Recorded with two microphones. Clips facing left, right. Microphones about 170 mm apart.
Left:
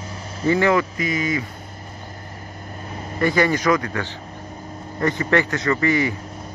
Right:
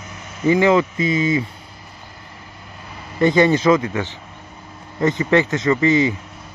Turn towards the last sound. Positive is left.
turn(degrees=-20)  # may be behind; listen again after turning